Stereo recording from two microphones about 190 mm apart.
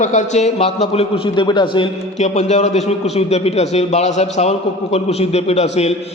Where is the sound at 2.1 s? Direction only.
35° left (ahead or behind).